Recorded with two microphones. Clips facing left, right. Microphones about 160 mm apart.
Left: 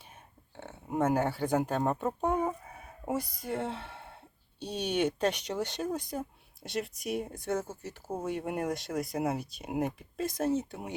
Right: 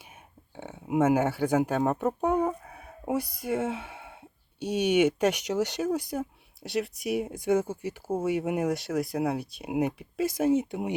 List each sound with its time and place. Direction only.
0.0 s speech: 10° right (ahead or behind)
2.5 s fowl: centre (ahead or behind)
3.2 s speech: 75° right (ahead or behind)
3.5 s a sound: 5° right (ahead or behind)
5.3 s speech: 80° right
5.7 s speech: centre (ahead or behind); by 10.9 s 20° right (ahead or behind)